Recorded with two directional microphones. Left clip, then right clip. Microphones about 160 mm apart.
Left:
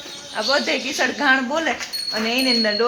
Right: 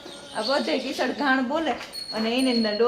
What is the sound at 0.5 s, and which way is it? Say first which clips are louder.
A woman's voice: left 4 dB; 30° left (ahead or behind).